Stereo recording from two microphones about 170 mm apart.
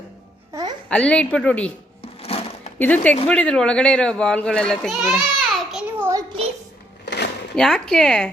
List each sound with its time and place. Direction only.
0.9 s speech: 5° left (ahead or behind)
2.0 s a sound: 35° left (ahead or behind)
2.7 s a child's voice: 10° left (ahead or behind)
6.0 s child singing: 20° right (ahead or behind)
7.0 s a sound: 90° left
7.5 s a child's voice: 5° left (ahead or behind)